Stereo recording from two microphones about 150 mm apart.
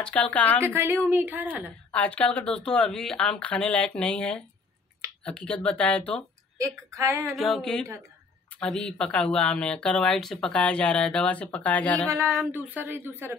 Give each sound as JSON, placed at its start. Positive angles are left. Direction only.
{"t": 0.0, "sound": "speech", "side_deg": 10}
{"t": 0.7, "sound": "a woman's voice", "side_deg": -15}
{"t": 1.9, "sound": "speech", "side_deg": 10}
{"t": 6.6, "sound": "a woman's voice", "side_deg": -20}
{"t": 7.2, "sound": "a sound", "side_deg": 0}
{"t": 8.5, "sound": "speech", "side_deg": 5}
{"t": 12.4, "sound": "a woman's voice", "side_deg": -15}